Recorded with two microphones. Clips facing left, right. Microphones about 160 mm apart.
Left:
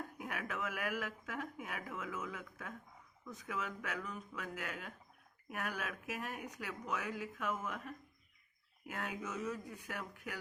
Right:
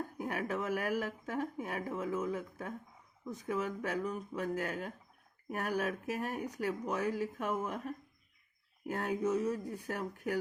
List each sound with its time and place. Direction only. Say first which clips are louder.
0.2 s speech: right 7 dB; 35° right (ahead or behind)